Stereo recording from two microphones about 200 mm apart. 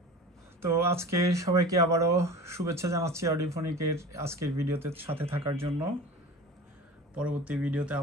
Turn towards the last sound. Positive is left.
turn(degrees=-5)  # may be behind; listen again after turning